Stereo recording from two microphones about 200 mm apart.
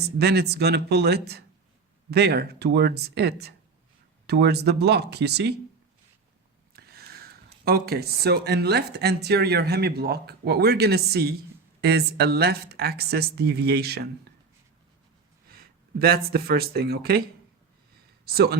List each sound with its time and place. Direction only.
0.2 s speech: 55° right (ahead or behind)
6.7 s speech: 50° right (ahead or behind)
15.5 s speech: 50° right (ahead or behind)
18.3 s speech: 50° right (ahead or behind)